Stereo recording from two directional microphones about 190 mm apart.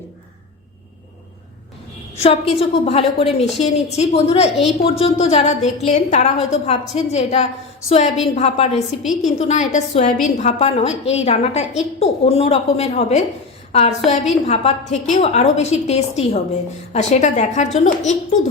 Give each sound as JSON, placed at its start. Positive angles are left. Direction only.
{"t": 2.1, "sound": "a woman's voice", "side_deg": 35}